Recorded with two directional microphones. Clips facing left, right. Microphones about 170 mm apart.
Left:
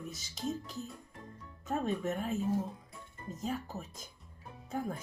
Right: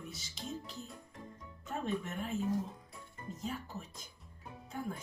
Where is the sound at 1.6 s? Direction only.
40° left (ahead or behind).